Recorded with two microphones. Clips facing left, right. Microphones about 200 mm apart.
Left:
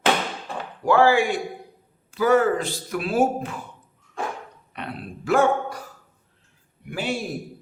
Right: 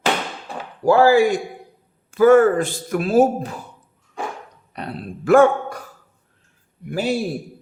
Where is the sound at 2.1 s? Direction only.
50° right (ahead or behind).